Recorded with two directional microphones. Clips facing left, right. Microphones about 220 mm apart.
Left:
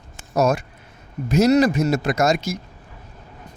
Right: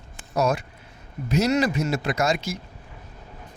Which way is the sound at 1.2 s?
45° left (ahead or behind).